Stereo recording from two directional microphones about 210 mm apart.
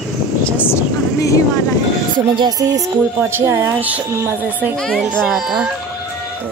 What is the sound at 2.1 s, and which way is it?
Speech, 20° right (ahead or behind).